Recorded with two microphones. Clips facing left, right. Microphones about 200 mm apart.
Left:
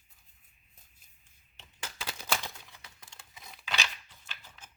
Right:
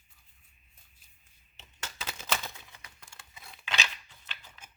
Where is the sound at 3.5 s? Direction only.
5° left (ahead or behind).